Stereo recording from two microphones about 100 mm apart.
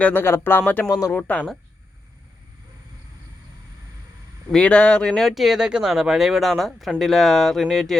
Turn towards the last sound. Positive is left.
turn(degrees=5)  # may be behind; listen again after turning